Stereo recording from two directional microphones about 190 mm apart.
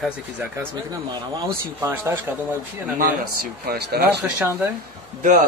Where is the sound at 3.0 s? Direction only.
50° right (ahead or behind).